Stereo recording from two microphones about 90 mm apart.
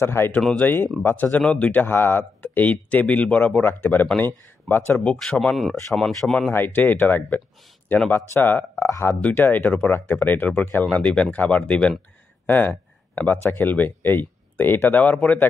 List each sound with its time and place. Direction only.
0.0 s speech: 25° left (ahead or behind); by 6.5 s 5° left (ahead or behind)
6.5 s speech: 20° left (ahead or behind)